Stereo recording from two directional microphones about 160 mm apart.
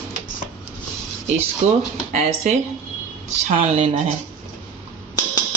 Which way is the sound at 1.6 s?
45° right (ahead or behind).